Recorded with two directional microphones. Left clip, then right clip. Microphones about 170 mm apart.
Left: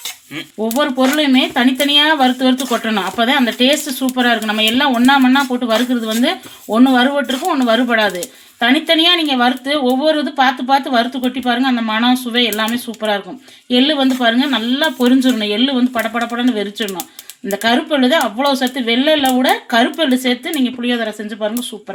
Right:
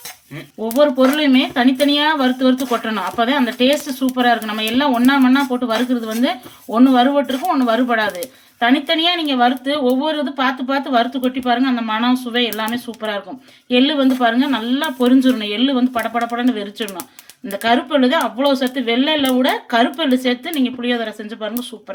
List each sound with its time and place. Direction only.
0.8 s speech: 50° left (ahead or behind)